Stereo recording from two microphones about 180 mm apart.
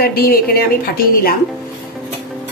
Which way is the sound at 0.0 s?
55° left (ahead or behind).